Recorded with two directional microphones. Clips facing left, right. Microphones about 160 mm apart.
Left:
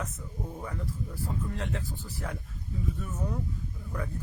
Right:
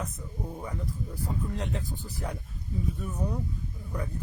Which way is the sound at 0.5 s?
10° right (ahead or behind).